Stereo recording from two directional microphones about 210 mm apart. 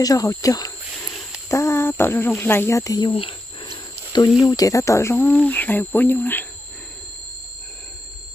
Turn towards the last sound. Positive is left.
turn(degrees=10)  # may be behind; listen again after turning